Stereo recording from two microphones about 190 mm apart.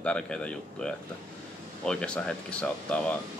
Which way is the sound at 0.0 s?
5° left (ahead or behind).